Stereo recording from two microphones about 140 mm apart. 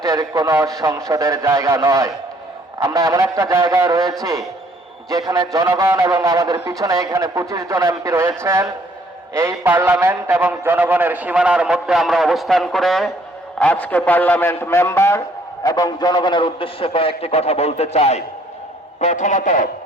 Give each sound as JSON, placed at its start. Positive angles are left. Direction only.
{"t": 0.0, "sound": "a man's voice", "side_deg": -25}